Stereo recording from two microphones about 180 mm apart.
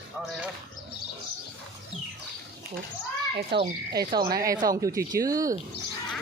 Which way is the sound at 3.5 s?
65° right (ahead or behind).